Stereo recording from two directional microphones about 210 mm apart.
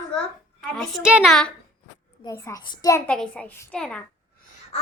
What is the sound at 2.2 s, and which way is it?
Child singing, 15° left (ahead or behind).